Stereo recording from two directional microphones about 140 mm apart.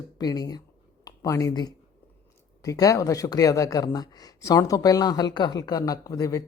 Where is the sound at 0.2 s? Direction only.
25° left (ahead or behind).